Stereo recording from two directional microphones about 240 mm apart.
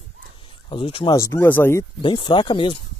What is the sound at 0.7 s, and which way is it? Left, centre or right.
Speech, left.